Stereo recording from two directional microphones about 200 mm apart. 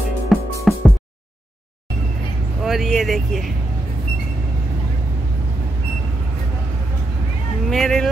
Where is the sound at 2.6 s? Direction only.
Centre (ahead or behind).